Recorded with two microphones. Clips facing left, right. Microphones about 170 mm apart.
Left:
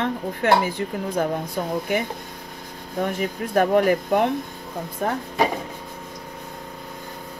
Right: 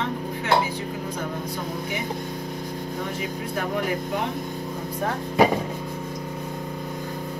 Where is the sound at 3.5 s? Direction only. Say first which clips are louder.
Left 9 dB; 55° left (ahead or behind).